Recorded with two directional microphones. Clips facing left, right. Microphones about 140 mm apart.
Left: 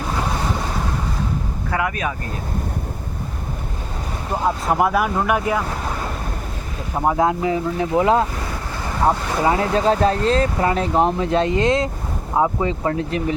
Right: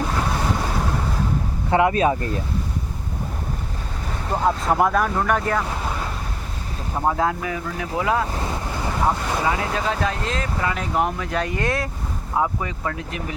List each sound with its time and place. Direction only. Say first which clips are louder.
1.7 s speech: right 6 dB; 25° right (ahead or behind)
4.4 s speech: even; 5° left (ahead or behind)
7.0 s speech: left 4 dB; 15° left (ahead or behind); by 13.2 s 35° left (ahead or behind)